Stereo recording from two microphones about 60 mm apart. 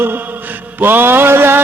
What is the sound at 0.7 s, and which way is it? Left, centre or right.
Mantra, right.